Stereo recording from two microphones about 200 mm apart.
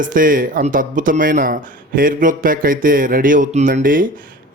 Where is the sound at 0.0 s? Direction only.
45° right (ahead or behind).